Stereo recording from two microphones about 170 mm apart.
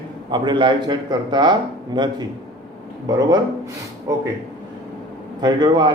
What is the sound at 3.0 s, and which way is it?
Speech, 25° right (ahead or behind).